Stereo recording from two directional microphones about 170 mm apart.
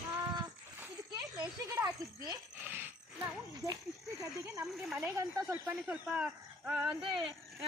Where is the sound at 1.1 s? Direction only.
20° right (ahead or behind).